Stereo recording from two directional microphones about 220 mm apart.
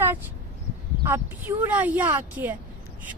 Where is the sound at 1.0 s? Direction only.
10° right (ahead or behind).